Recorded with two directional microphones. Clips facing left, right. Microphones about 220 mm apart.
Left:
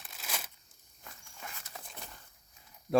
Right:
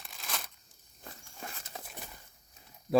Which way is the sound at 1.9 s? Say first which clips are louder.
Right 2 dB; 5° right (ahead or behind).